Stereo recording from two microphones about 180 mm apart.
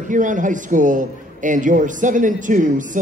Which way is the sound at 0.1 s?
45° right (ahead or behind).